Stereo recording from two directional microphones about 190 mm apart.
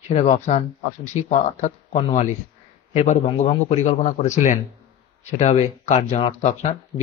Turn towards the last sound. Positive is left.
turn(degrees=35)  # may be behind; listen again after turning